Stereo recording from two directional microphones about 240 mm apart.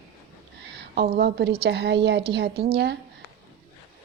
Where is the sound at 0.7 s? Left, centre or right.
Right.